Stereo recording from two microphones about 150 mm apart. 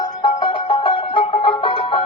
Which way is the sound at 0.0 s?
30° left (ahead or behind).